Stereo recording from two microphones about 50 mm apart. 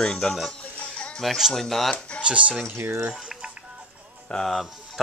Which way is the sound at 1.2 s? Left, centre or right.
Centre.